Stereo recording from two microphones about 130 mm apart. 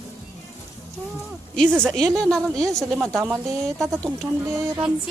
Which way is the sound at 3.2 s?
15° right (ahead or behind).